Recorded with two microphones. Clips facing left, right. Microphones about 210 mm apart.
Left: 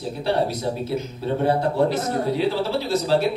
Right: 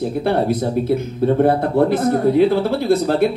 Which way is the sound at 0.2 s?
55° right (ahead or behind).